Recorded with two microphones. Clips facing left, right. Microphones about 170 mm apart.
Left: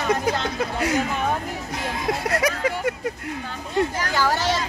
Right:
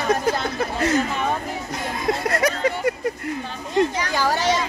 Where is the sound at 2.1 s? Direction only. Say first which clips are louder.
Right 2 dB; 5° left (ahead or behind).